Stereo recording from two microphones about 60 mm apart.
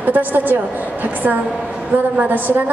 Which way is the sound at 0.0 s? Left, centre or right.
Right.